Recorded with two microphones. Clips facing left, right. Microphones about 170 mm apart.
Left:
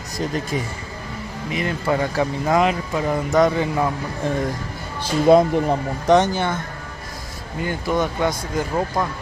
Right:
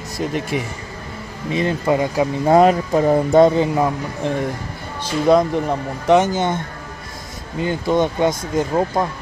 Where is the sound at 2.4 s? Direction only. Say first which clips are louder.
Right 8 dB; 35° right (ahead or behind).